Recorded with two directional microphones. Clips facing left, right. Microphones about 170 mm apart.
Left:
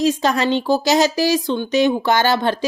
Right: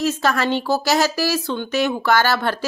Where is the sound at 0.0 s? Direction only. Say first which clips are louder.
Left 3 dB; 15° left (ahead or behind).